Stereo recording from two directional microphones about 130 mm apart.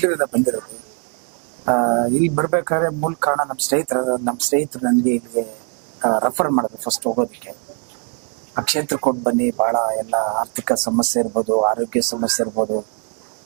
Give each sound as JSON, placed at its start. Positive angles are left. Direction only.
{"t": 0.0, "sound": "speech", "side_deg": -15}
{"t": 1.6, "sound": "speech", "side_deg": -20}
{"t": 6.0, "sound": "speech", "side_deg": -20}
{"t": 8.5, "sound": "speech", "side_deg": -10}